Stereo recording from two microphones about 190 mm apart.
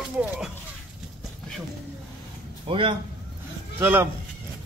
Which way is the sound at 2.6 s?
25° right (ahead or behind).